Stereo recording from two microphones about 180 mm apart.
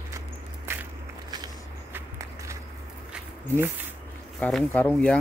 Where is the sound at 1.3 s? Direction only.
20° right (ahead or behind).